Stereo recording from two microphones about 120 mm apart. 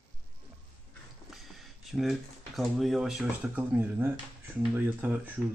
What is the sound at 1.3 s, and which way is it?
Speech, centre (ahead or behind).